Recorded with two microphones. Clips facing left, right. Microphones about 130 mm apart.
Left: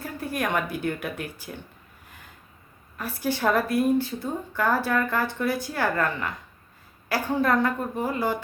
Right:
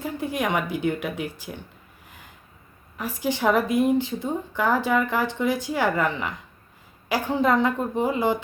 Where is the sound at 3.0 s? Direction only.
15° right (ahead or behind).